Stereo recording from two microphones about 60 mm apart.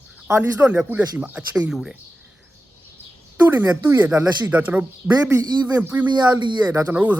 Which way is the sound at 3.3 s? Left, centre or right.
Right.